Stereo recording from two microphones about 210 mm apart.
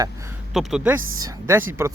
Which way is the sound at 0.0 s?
15° right (ahead or behind).